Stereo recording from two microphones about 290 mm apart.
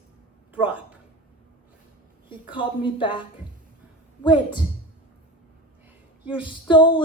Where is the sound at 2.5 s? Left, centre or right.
Centre.